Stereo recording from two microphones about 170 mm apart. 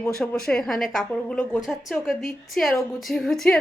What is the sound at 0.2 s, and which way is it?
A woman's voice, 5° left (ahead or behind).